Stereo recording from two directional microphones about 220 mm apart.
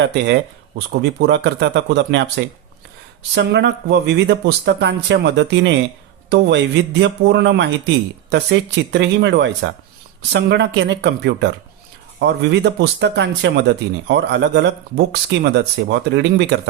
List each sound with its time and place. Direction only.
0.0 s speech: 50° right (ahead or behind)